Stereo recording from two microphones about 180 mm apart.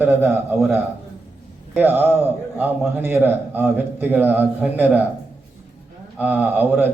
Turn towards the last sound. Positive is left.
turn(degrees=-10)  # may be behind; listen again after turning